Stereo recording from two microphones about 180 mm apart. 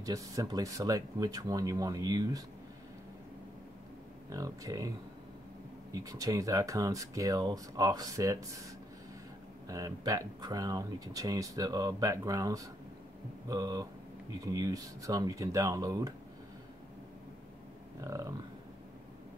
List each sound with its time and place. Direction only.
0.0 s speech: 20° right (ahead or behind)
4.3 s speech: 20° right (ahead or behind)
9.7 s speech: 20° right (ahead or behind)
18.0 s a sound: 15° right (ahead or behind)